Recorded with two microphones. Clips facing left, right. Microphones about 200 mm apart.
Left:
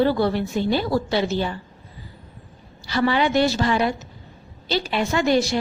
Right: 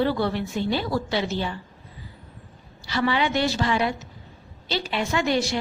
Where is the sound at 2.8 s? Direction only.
40° left (ahead or behind).